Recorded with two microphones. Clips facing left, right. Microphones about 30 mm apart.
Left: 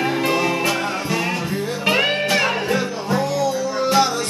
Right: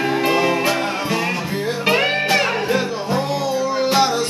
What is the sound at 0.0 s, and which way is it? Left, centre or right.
Music, centre.